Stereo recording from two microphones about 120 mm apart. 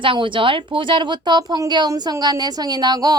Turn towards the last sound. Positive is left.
turn(degrees=-35)  # may be behind; listen again after turning